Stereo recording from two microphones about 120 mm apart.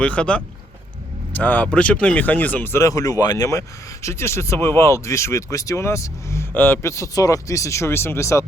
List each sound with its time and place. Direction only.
0.0 s speech: 10° left (ahead or behind)
2.8 s speech: 30° left (ahead or behind)